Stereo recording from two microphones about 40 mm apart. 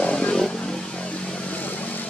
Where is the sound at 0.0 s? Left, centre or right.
Left.